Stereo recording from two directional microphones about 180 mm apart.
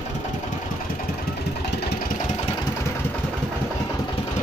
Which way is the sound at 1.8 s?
60° left (ahead or behind).